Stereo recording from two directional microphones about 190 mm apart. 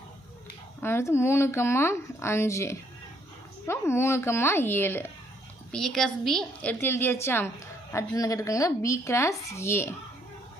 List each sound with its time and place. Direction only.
0.8 s speech: 15° left (ahead or behind)